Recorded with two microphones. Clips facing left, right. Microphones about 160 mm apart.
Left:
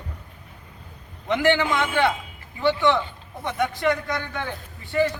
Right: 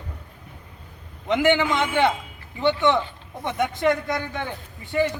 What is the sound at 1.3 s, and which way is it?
A man's voice, 20° right (ahead or behind).